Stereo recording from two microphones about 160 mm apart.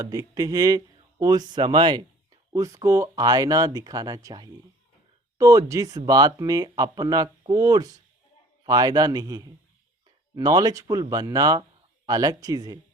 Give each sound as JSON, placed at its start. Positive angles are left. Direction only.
{"t": 0.0, "sound": "speech", "side_deg": -20}